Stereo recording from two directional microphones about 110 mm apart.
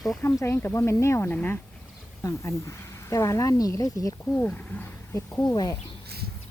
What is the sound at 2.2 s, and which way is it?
Speech, 25° left (ahead or behind).